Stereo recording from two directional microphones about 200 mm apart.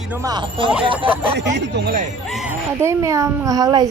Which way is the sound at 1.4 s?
60° right (ahead or behind).